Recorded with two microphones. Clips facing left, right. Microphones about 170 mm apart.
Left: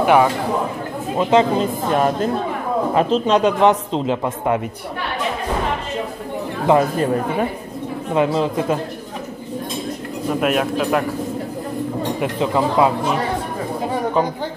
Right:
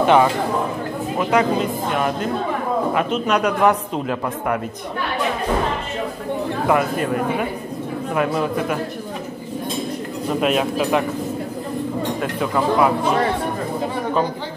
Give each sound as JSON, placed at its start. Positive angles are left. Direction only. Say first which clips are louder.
{"t": 0.0, "sound": "speech", "louder": "even", "side_deg": 10}
{"t": 1.1, "sound": "speech", "louder": "left 3 dB", "side_deg": 25}
{"t": 8.1, "sound": "speech", "louder": "left 3 dB", "side_deg": 25}
{"t": 10.4, "sound": "speech", "louder": "even", "side_deg": 0}
{"t": 12.2, "sound": "speech", "louder": "left 4 dB", "side_deg": 20}